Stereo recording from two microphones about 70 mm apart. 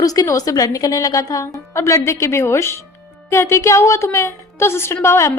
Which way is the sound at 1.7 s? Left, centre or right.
Left.